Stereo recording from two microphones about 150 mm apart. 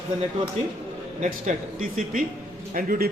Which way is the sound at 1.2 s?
60° right (ahead or behind).